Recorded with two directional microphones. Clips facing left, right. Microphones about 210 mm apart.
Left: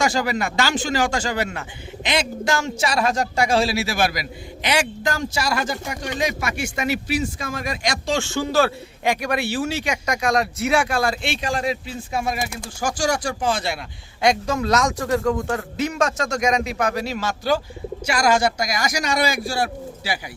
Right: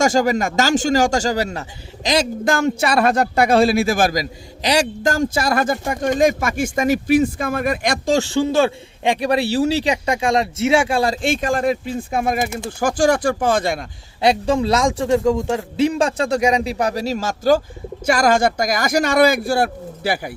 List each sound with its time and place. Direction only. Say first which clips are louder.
0.0 s speech: right 5 dB; 45° right (ahead or behind)
14.2 s a man's voice: right 4 dB; 30° right (ahead or behind); by 20.3 s 55° right (ahead or behind)